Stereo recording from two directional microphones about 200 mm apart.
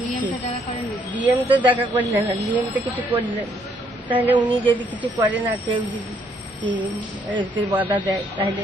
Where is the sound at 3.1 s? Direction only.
30° right (ahead or behind).